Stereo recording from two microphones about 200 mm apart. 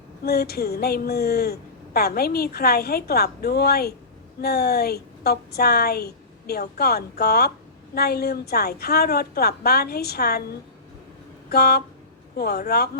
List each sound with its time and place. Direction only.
0.3 s speech: 50° left (ahead or behind)
11.4 s a sound: 50° left (ahead or behind)
12.4 s speech: 50° left (ahead or behind)